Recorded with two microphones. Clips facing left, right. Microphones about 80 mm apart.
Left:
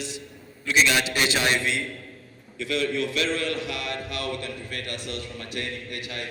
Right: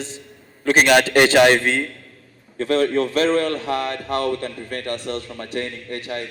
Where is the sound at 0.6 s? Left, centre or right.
Right.